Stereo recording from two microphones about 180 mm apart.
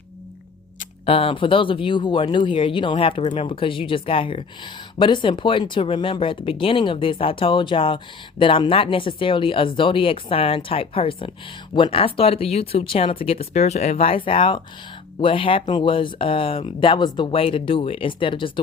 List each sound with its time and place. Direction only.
1.0 s speech: 30° left (ahead or behind)